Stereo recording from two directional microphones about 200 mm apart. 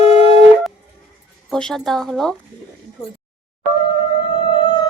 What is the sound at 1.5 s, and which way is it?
Speech, centre (ahead or behind).